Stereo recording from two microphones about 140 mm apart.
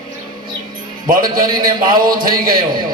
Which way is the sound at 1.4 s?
90° right.